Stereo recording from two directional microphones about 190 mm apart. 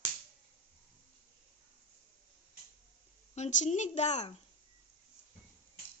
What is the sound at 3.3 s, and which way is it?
A woman's voice, 40° left (ahead or behind).